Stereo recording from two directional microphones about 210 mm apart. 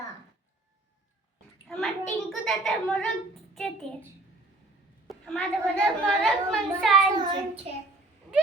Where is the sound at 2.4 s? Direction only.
Centre (ahead or behind).